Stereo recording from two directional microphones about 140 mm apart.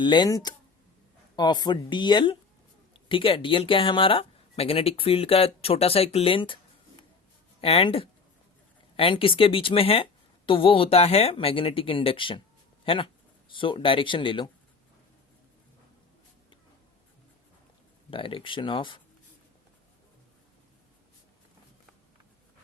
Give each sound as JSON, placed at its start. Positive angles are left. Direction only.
{"t": 0.0, "sound": "speech", "side_deg": 35}
{"t": 7.6, "sound": "speech", "side_deg": 40}
{"t": 18.1, "sound": "speech", "side_deg": 40}